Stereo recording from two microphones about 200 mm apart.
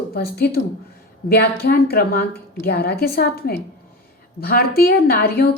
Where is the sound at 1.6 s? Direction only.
50° left (ahead or behind).